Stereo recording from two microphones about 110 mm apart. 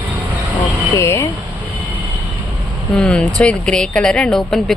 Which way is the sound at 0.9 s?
25° left (ahead or behind).